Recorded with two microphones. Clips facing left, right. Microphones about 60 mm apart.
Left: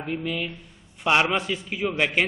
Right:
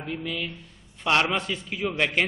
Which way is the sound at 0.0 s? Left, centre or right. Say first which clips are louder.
Left 3 dB; centre.